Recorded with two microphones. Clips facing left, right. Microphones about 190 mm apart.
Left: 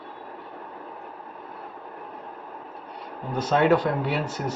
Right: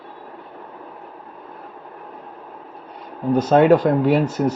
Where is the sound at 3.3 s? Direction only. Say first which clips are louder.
Right 7 dB; 45° right (ahead or behind).